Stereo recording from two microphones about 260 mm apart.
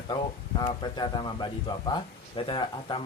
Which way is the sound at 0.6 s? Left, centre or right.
Centre.